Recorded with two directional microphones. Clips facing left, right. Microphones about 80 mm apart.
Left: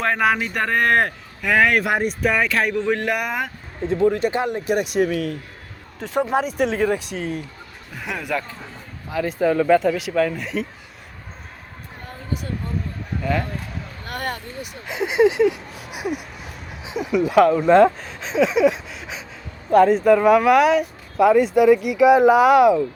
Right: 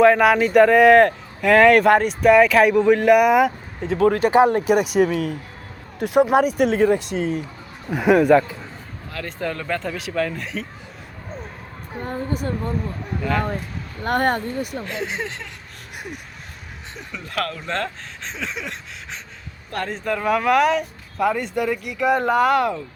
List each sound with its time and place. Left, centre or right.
0.0 s a man's voice: centre
3.8 s speech: right
4.7 s a man's voice: centre
9.0 s a man's voice: centre
12.0 s a sound: right
13.2 s a man's voice: centre
14.0 s speech: right
14.8 s a sound: centre
17.7 s a man's voice: centre